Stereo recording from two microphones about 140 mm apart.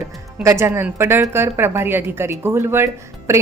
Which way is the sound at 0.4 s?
20° right (ahead or behind).